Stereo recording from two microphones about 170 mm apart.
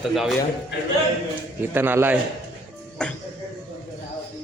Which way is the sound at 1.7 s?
10° right (ahead or behind).